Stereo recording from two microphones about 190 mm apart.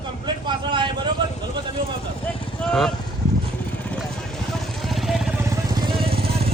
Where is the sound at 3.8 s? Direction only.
5° left (ahead or behind).